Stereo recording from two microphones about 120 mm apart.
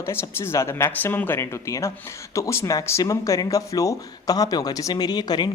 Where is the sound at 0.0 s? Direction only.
20° left (ahead or behind).